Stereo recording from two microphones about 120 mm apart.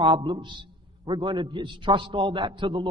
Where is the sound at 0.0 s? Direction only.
40° right (ahead or behind).